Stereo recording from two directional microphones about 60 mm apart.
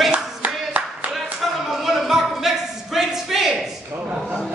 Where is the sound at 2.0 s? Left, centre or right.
Centre.